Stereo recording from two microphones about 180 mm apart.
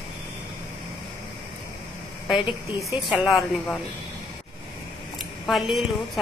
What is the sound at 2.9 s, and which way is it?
Speech, centre (ahead or behind).